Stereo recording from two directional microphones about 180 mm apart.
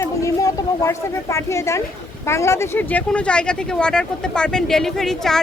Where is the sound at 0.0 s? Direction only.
20° left (ahead or behind).